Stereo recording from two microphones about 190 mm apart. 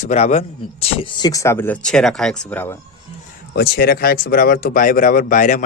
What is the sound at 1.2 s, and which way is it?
Speech, 15° left (ahead or behind).